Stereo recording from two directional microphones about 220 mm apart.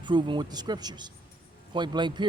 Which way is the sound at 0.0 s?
20° right (ahead or behind).